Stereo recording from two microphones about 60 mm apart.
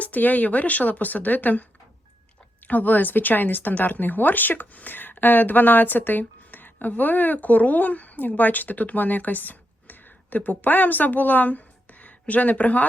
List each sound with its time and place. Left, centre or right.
0.0 s speech: left
2.6 s speech: left